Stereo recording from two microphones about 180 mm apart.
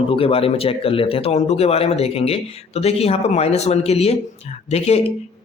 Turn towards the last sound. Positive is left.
turn(degrees=35)  # may be behind; listen again after turning